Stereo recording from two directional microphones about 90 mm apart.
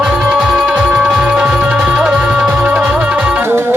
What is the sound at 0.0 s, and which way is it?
Music, 5° right (ahead or behind).